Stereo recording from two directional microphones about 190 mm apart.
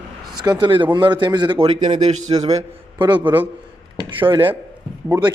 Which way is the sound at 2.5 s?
25° right (ahead or behind).